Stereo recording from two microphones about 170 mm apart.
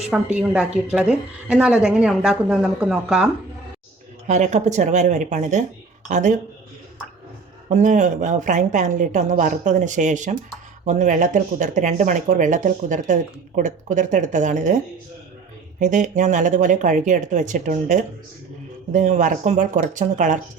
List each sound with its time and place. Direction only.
0.1 s a woman's voice: 5° right (ahead or behind)
4.3 s speech: 45° right (ahead or behind)
7.7 s speech: 45° right (ahead or behind)
15.8 s speech: 45° right (ahead or behind)